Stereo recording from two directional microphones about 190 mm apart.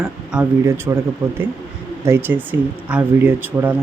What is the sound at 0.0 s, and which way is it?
Speech, 5° right (ahead or behind).